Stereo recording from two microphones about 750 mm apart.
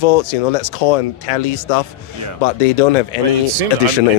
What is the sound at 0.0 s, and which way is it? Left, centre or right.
Speech, left.